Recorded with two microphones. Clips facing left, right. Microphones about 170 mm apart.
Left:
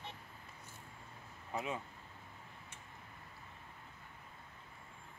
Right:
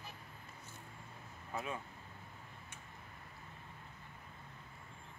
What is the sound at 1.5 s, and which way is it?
Speech, 20° left (ahead or behind).